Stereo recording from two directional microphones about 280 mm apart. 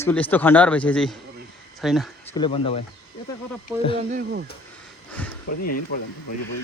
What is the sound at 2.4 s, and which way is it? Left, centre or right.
Speech, centre.